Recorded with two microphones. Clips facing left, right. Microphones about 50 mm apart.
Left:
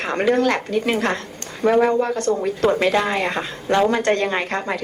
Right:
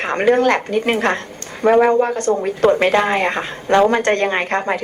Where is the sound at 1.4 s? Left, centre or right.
Right.